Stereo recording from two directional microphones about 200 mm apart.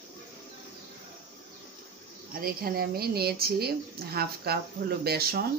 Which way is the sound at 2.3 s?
45° right (ahead or behind).